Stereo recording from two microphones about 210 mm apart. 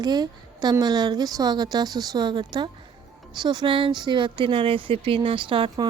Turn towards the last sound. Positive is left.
turn(degrees=-20)  # may be behind; listen again after turning